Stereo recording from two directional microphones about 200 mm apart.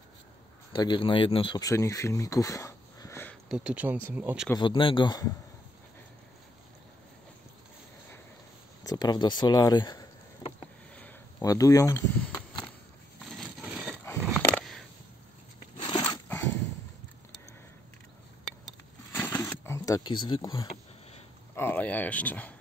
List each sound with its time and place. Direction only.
0.7 s speech: 25° left (ahead or behind)
3.4 s speech: 5° right (ahead or behind)
4.6 s speech: 25° left (ahead or behind)
8.8 s speech: 20° left (ahead or behind)
11.0 s a sound: 10° left (ahead or behind)
13.4 s coin: 5° right (ahead or behind)
14.0 s a sound: 5° left (ahead or behind)
15.8 s dog: 20° left (ahead or behind)
19.3 s camera: 10° left (ahead or behind)
21.5 s speech: 10° left (ahead or behind)